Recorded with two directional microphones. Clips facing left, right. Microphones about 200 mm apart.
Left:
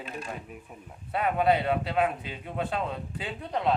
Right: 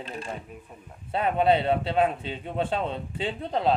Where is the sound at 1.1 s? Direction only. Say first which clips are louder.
Right 2 dB; 25° right (ahead or behind).